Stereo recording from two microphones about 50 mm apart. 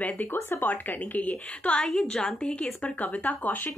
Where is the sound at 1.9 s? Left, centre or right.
Centre.